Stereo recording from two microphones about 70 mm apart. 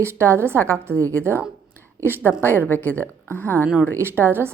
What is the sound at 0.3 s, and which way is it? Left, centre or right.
Speech, right.